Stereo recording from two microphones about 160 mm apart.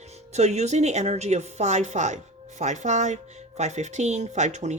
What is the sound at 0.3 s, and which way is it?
Speech, 45° right (ahead or behind).